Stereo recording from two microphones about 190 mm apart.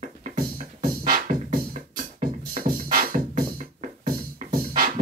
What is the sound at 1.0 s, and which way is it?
Music, 50° right (ahead or behind).